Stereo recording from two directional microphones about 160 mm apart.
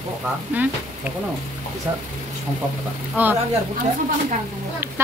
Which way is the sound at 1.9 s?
25° right (ahead or behind).